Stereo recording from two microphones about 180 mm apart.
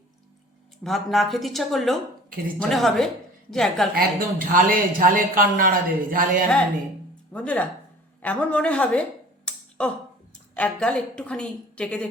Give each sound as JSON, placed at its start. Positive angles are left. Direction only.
{"t": 0.9, "sound": "a woman's voice", "side_deg": 0}
{"t": 3.9, "sound": "speech", "side_deg": -50}
{"t": 7.3, "sound": "a woman's voice", "side_deg": 5}